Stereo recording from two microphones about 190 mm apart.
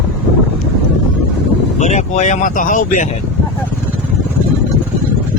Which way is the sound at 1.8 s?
40° left (ahead or behind).